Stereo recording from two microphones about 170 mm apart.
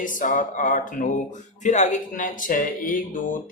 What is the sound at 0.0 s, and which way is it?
Speech, 50° left (ahead or behind).